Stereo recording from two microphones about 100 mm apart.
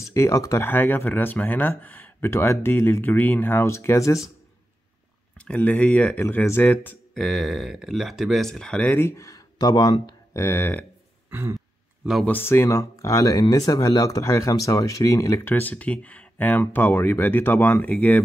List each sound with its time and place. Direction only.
0.1 s speech: 30° left (ahead or behind)
0.7 s speech: 20° left (ahead or behind)
5.4 s speech: 10° left (ahead or behind)
7.2 s speech: centre (ahead or behind)
8.8 s speech: 25° left (ahead or behind); by 9.9 s 40° left (ahead or behind)
10.0 s music: 30° left (ahead or behind)
11.2 s throat clearing: 25° right (ahead or behind)
12.3 s speech: 25° left (ahead or behind)